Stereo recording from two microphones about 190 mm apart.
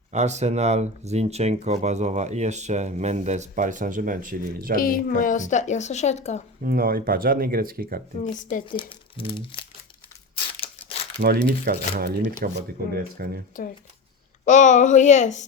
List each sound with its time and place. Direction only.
0.1 s speech: 35° right (ahead or behind)
4.8 s a woman's voice: 50° left (ahead or behind)
6.7 s speech: 50° right (ahead or behind)
8.2 s speech: 40° left (ahead or behind)
8.6 s speech: 25° left (ahead or behind)
11.2 s speech: 50° right (ahead or behind)
14.4 s a woman's voice: 40° left (ahead or behind)